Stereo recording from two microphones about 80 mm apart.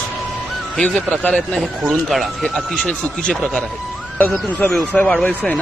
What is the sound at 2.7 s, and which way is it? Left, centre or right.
Speech, centre.